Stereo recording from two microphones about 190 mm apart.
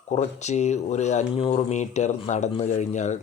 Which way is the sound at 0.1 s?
35° left (ahead or behind).